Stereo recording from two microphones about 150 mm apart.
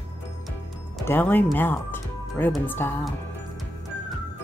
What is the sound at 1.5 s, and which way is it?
Music, 15° left (ahead or behind).